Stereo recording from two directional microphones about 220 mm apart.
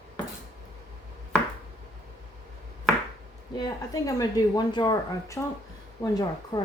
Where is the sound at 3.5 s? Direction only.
15° left (ahead or behind).